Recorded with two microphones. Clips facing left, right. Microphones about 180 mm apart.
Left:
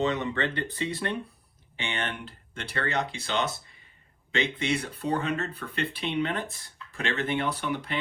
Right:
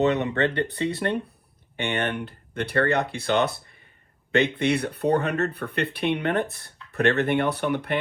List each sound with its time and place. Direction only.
0.0 s speech: 65° right (ahead or behind)